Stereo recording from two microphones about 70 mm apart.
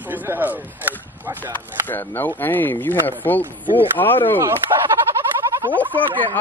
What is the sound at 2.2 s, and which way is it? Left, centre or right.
Speech, left.